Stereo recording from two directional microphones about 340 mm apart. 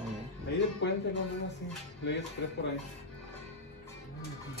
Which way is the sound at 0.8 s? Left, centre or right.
Left.